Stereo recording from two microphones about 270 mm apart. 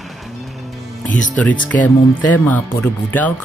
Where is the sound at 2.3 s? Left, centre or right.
Centre.